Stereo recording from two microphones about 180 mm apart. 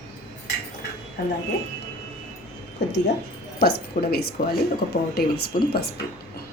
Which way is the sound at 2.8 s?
75° left (ahead or behind).